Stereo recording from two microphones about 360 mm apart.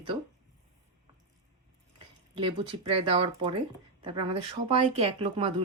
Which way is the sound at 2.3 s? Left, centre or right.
Centre.